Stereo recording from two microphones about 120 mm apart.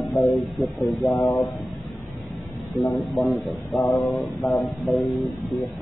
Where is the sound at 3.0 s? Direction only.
Centre (ahead or behind).